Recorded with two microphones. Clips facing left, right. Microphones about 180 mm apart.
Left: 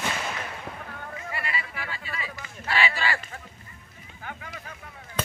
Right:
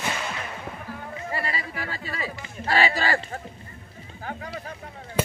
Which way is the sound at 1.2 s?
40° right (ahead or behind).